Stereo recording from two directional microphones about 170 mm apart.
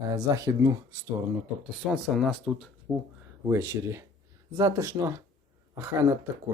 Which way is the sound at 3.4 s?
15° right (ahead or behind).